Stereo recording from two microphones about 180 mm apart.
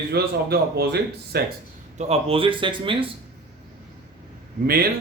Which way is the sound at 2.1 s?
30° right (ahead or behind).